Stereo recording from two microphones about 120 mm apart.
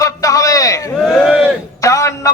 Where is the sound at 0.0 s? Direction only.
30° left (ahead or behind).